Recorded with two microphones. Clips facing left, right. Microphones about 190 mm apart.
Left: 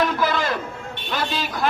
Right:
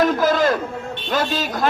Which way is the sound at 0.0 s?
45° right (ahead or behind).